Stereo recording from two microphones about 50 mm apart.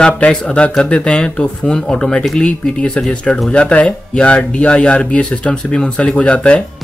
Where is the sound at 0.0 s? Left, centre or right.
Left.